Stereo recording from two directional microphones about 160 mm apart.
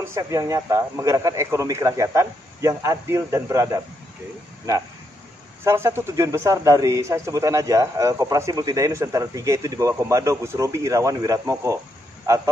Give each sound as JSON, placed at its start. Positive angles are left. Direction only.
{"t": 0.0, "sound": "speech", "side_deg": -20}
{"t": 5.6, "sound": "speech", "side_deg": -15}